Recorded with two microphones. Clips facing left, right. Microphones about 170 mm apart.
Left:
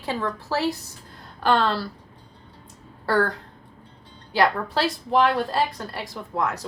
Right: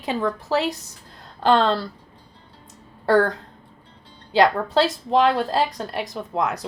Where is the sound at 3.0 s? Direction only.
20° right (ahead or behind).